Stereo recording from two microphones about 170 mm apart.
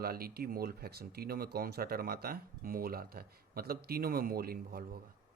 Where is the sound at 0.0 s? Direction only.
60° right (ahead or behind).